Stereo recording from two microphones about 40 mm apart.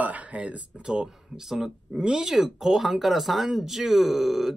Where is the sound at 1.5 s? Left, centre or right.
Centre.